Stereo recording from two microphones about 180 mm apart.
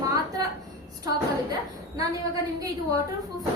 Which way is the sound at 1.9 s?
20° right (ahead or behind).